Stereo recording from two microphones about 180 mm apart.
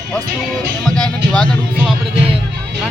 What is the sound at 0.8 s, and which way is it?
Speech, 5° left (ahead or behind).